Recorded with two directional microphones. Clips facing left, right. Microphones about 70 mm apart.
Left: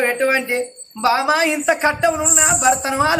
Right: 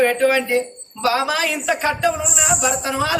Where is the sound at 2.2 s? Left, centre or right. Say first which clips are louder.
Left 3 dB; left.